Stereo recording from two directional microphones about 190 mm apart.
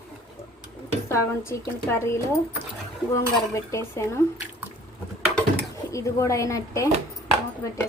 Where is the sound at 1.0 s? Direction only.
15° left (ahead or behind).